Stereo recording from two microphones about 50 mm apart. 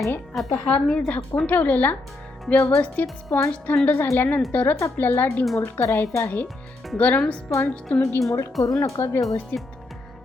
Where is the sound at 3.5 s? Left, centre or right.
Left.